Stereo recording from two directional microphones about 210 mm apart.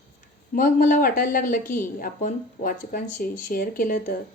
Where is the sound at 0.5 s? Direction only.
40° left (ahead or behind).